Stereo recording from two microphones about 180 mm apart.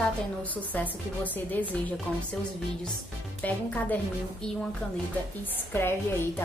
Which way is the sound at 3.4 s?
10° left (ahead or behind).